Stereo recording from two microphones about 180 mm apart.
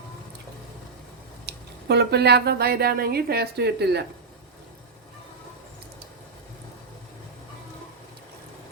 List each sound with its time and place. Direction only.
1.5 s speech: 65° right (ahead or behind)